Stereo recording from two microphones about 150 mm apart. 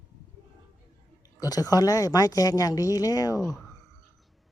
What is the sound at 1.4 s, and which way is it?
Speech, 25° left (ahead or behind).